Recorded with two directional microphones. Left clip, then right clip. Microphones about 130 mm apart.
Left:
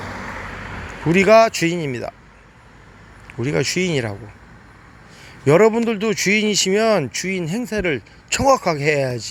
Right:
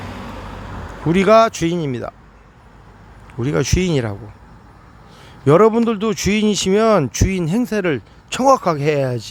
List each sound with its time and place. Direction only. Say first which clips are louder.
1.0 s speech: even; 25° right (ahead or behind)
3.4 s speech: right 1 dB; 30° right (ahead or behind)
3.9 s speech: right 2 dB; 20° right (ahead or behind)
5.5 s speech: right 2 dB; 25° right (ahead or behind)
7.0 s speech: right 2 dB; 40° right (ahead or behind)
8.3 s speech: right 2 dB; 25° right (ahead or behind)